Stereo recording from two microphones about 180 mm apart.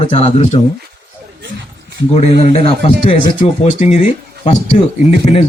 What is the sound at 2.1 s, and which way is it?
A man's voice, 35° left (ahead or behind).